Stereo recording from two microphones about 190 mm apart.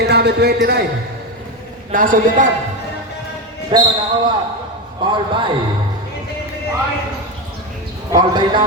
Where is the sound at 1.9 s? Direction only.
45° right (ahead or behind).